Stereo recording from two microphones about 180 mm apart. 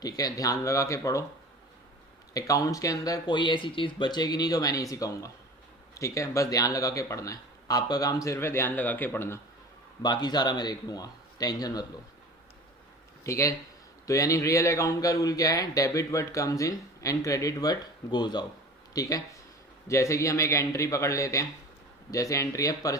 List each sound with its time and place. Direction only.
0.0 s a man's voice: 20° left (ahead or behind)
2.3 s a man's voice: 20° left (ahead or behind)
10.0 s speech: 25° left (ahead or behind)
13.2 s a man's voice: 15° left (ahead or behind)